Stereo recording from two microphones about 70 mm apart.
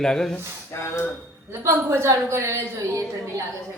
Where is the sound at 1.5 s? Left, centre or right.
Right.